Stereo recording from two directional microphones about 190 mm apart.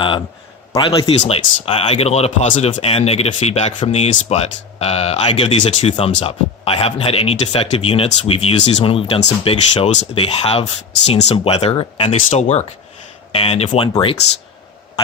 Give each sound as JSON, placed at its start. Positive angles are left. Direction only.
{"t": 0.7, "sound": "speech", "side_deg": 25}